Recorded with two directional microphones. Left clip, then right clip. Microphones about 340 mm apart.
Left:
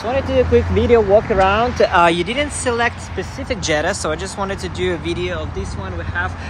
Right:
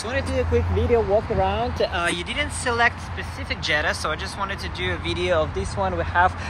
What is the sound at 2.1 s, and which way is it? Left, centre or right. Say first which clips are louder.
Speech: left 6 dB; centre.